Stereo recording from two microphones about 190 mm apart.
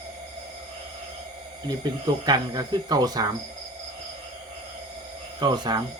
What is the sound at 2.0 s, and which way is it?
Speech, 20° right (ahead or behind).